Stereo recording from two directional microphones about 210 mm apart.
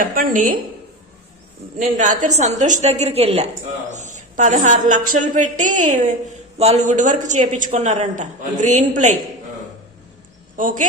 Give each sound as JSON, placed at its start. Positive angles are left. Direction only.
{"t": 0.0, "sound": "a woman's voice", "side_deg": -40}
{"t": 2.0, "sound": "a woman's voice", "side_deg": -35}
{"t": 10.6, "sound": "a woman's voice", "side_deg": -40}